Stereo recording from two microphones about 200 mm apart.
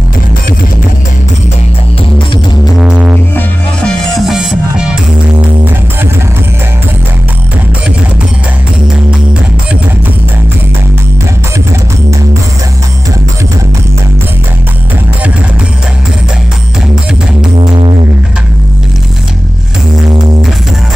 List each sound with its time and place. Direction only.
2.8 s music: 5° right (ahead or behind)
17.6 s music: 25° right (ahead or behind)